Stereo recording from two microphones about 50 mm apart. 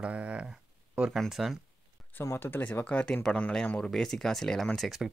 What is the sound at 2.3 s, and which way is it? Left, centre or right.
Speech, left.